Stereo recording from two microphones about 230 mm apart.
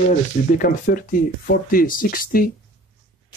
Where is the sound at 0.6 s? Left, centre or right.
Left.